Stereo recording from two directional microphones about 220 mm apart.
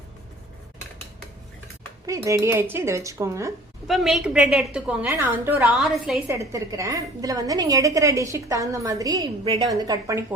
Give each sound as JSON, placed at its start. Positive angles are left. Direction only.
{"t": 2.0, "sound": "a woman's voice", "side_deg": -15}
{"t": 3.8, "sound": "a woman's voice", "side_deg": 0}
{"t": 6.2, "sound": "a woman's voice", "side_deg": -15}